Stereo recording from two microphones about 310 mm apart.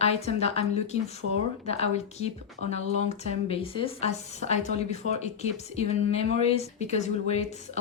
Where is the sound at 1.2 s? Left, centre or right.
Right.